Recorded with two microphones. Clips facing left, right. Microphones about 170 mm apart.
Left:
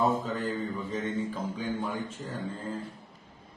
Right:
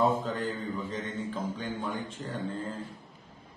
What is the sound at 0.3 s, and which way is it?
A man's voice, 10° left (ahead or behind).